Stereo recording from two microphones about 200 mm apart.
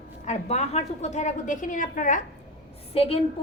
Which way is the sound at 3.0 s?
30° left (ahead or behind).